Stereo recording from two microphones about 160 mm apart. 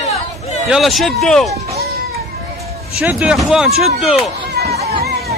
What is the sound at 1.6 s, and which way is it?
Speech, 75° right (ahead or behind).